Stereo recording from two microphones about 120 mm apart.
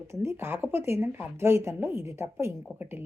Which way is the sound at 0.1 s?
20° right (ahead or behind).